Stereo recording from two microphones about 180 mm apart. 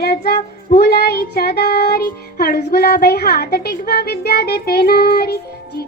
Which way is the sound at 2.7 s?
60° left (ahead or behind).